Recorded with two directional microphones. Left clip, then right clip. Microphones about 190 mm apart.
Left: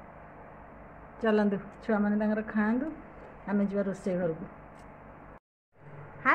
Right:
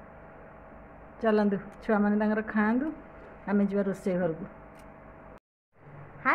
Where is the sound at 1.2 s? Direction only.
Centre (ahead or behind).